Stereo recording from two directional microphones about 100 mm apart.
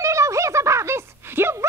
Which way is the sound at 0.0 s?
30° right (ahead or behind).